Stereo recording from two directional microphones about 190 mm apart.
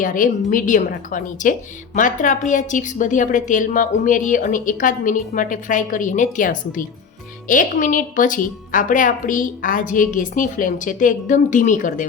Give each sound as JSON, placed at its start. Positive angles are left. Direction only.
{"t": 0.0, "sound": "a woman's voice", "side_deg": 45}